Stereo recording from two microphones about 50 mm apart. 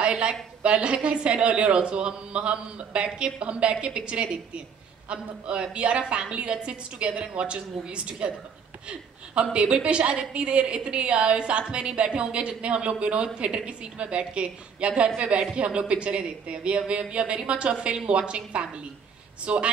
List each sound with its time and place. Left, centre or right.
0.0 s a woman's voice: centre
9.3 s a woman's voice: right